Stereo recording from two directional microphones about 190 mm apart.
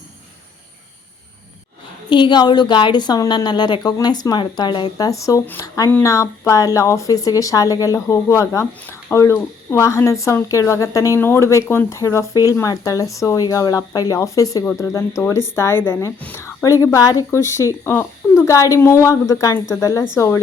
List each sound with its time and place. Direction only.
2.0 s a woman's voice: 25° left (ahead or behind)